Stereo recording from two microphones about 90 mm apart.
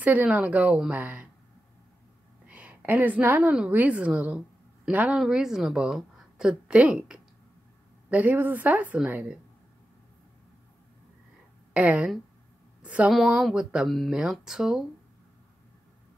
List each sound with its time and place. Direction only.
0.0 s a woman's voice: 20° right (ahead or behind)
2.4 s a woman's voice: 15° right (ahead or behind)
11.7 s speech: 15° right (ahead or behind)
12.8 s a sound: 15° right (ahead or behind)
13.1 s speech: 5° right (ahead or behind)